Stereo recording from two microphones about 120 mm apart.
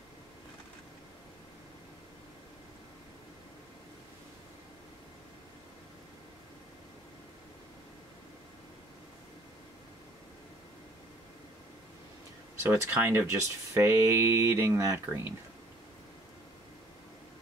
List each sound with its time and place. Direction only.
12.6 s speech: 20° right (ahead or behind)